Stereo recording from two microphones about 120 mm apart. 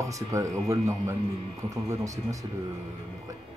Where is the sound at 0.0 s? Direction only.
25° right (ahead or behind).